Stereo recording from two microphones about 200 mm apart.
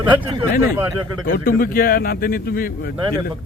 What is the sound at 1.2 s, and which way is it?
Speech, 45° left (ahead or behind).